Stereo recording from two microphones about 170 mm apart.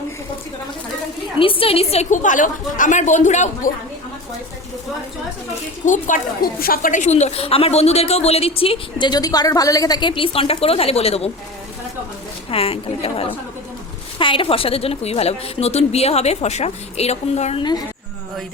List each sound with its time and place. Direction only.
1.4 s a woman's voice: 30° left (ahead or behind)
5.8 s a woman's voice: 50° left (ahead or behind)
12.5 s a woman's voice: 35° left (ahead or behind)
17.6 s a woman's voice: 25° left (ahead or behind)